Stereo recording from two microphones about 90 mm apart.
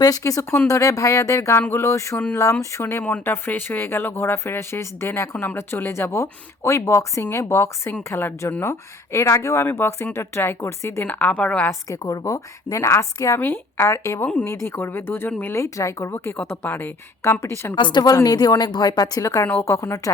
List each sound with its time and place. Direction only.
0.0 s a woman's voice: 40° left (ahead or behind)
9.6 s speech: 25° left (ahead or behind)
11.9 s a woman's voice: 40° left (ahead or behind)
17.7 s a woman's voice: 60° left (ahead or behind)
18.0 s a woman's voice: 45° left (ahead or behind)